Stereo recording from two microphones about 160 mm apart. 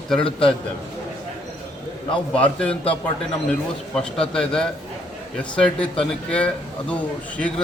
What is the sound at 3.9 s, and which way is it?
A man's voice, 5° left (ahead or behind).